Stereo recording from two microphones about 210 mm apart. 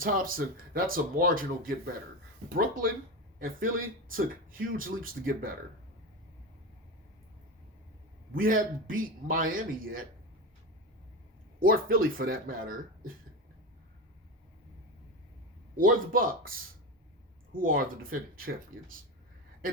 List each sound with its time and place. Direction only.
0.0 s speech: 40° right (ahead or behind)
3.3 s speech: 40° right (ahead or behind)
8.3 s a man's voice: 40° right (ahead or behind)
11.6 s speech: 45° right (ahead or behind)
15.7 s speech: 40° right (ahead or behind)